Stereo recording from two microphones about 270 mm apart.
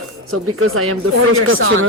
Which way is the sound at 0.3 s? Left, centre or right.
Right.